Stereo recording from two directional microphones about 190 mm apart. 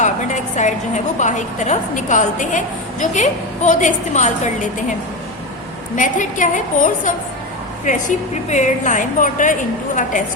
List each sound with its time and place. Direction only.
0.0 s a woman's voice: 40° left (ahead or behind)
6.0 s a woman's voice: 40° left (ahead or behind)